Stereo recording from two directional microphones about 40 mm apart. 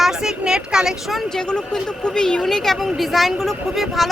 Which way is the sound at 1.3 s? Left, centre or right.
Centre.